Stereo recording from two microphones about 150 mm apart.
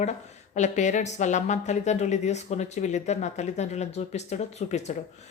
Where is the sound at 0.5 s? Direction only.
50° left (ahead or behind).